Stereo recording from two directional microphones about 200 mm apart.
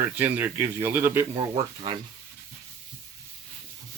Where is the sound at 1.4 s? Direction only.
25° right (ahead or behind).